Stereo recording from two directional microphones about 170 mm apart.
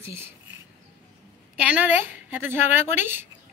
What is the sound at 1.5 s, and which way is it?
A woman's voice, 5° right (ahead or behind).